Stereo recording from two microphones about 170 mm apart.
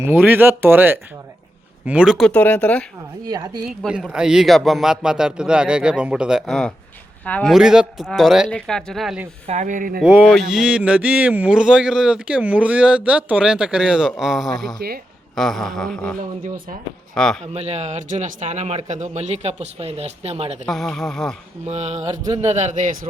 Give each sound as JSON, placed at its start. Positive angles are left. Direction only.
{"t": 0.0, "sound": "speech", "side_deg": -15}
{"t": 3.2, "sound": "speech", "side_deg": -20}
{"t": 3.7, "sound": "a man's voice", "side_deg": -5}
{"t": 7.5, "sound": "speech", "side_deg": -5}
{"t": 9.5, "sound": "speech", "side_deg": -45}
{"t": 10.0, "sound": "speech", "side_deg": -5}
{"t": 14.8, "sound": "speech", "side_deg": -65}
{"t": 15.4, "sound": "speech", "side_deg": 0}
{"t": 17.4, "sound": "a man's voice", "side_deg": -40}
{"t": 20.7, "sound": "speech", "side_deg": 0}
{"t": 21.6, "sound": "a man's voice", "side_deg": -40}